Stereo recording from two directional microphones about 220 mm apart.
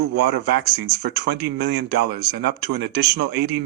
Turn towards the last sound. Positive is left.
turn(degrees=-50)  # may be behind; listen again after turning